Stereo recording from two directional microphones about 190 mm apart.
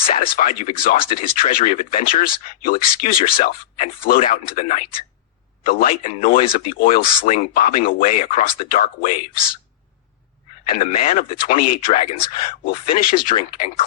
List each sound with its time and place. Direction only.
0.0 s speech: 30° left (ahead or behind)
0.3 s speech: 40° left (ahead or behind)
1.5 s speech: 30° left (ahead or behind)
1.7 s speech: 40° left (ahead or behind)
6.5 s speech: 50° left (ahead or behind)
10.8 s speech: 40° left (ahead or behind)